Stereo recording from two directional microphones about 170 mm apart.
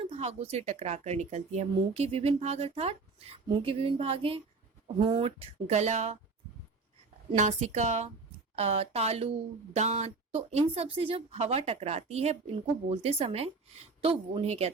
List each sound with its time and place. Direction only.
0.0 s a woman's voice: 35° right (ahead or behind)
7.3 s a woman's voice: 45° right (ahead or behind)